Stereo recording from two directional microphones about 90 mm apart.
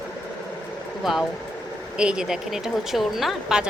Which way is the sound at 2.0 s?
10° right (ahead or behind).